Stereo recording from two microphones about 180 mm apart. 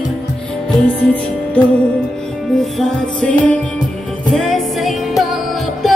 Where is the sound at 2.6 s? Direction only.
5° left (ahead or behind).